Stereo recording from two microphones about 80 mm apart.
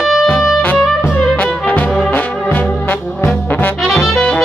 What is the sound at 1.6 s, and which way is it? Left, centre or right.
Brass instrument, left.